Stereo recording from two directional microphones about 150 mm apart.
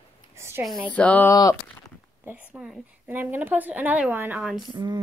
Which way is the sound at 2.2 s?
10° right (ahead or behind).